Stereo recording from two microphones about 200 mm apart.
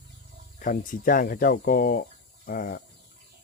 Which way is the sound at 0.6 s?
40° left (ahead or behind).